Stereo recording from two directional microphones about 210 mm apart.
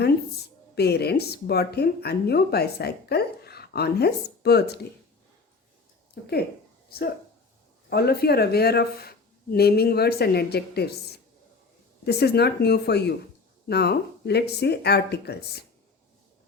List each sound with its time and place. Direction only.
0.8 s speech: 50° left (ahead or behind)
6.9 s speech: 45° left (ahead or behind)